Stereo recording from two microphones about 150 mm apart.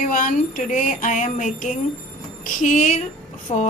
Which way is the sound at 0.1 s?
60° left (ahead or behind).